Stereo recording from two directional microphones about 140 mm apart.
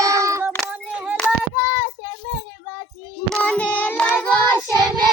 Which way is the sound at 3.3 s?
10° left (ahead or behind).